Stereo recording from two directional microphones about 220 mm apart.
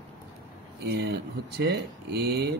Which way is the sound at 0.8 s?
45° right (ahead or behind).